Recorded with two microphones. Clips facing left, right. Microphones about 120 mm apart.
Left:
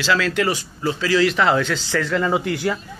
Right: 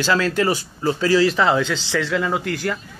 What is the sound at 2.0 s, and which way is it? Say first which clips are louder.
Speech: left 2 dB; centre (ahead or behind).